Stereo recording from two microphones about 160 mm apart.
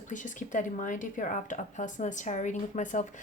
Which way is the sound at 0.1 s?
50° left (ahead or behind).